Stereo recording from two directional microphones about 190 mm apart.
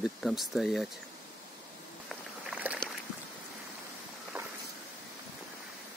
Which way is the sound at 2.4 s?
5° right (ahead or behind).